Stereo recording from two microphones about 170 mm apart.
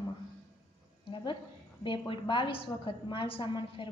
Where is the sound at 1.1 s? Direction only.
30° left (ahead or behind).